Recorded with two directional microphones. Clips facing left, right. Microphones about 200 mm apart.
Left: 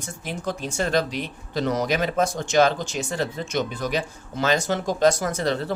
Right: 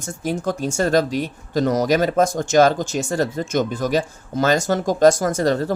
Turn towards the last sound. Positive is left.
turn(degrees=-45)  # may be behind; listen again after turning